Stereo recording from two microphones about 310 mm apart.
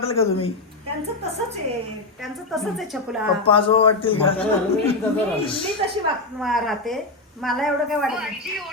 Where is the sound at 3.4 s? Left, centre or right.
Centre.